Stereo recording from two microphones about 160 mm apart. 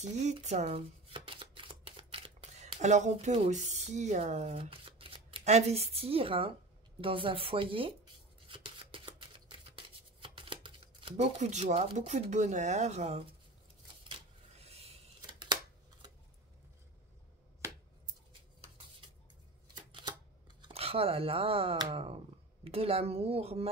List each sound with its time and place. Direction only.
0.0 s shuffling cards: 45° right (ahead or behind)
2.8 s speech: 45° right (ahead or behind)
8.5 s a sound: 35° right (ahead or behind)
11.3 s speech: 45° right (ahead or behind)
14.0 s vehicle: 35° right (ahead or behind)
15.4 s scissors: 25° right (ahead or behind)
17.6 s finger snapping: 20° right (ahead or behind)
19.9 s camera: 30° right (ahead or behind)
20.6 s speech: 40° right (ahead or behind)